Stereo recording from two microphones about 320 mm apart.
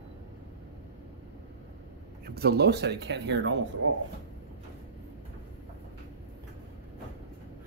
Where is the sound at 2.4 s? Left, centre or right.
Right.